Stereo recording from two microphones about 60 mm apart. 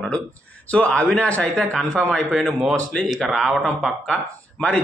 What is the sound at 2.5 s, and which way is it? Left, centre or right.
Speech, centre.